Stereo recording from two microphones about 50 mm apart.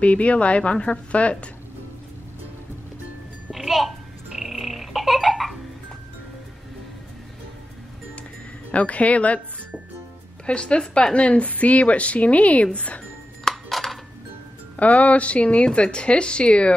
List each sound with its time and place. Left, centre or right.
0.0 s a woman's voice: left
3.5 s a sound: centre
8.7 s a woman's voice: left
10.4 s a woman's voice: left
13.4 s music: centre
14.8 s a woman's voice: left